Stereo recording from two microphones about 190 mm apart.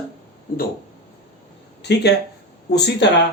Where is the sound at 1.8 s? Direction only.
65° left (ahead or behind).